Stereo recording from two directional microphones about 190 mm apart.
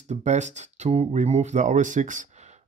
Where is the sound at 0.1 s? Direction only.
40° right (ahead or behind).